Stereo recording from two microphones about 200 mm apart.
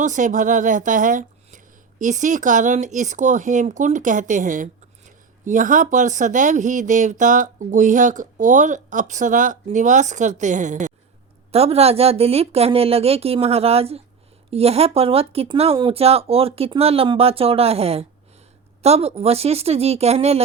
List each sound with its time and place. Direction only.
0.0 s a woman's voice: 40° right (ahead or behind)